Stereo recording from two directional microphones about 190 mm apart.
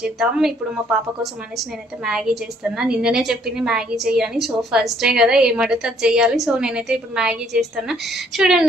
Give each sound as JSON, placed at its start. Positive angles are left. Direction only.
{"t": 0.0, "sound": "a woman's voice", "side_deg": 0}
{"t": 2.0, "sound": "a woman's voice", "side_deg": 0}